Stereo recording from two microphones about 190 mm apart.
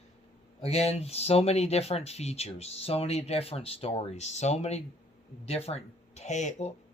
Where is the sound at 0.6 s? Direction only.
35° left (ahead or behind).